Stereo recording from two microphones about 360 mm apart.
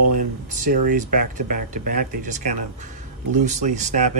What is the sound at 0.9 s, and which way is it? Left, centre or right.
Speech, right.